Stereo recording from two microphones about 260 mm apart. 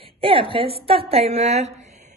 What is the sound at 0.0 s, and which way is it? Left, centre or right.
A woman's voice, right.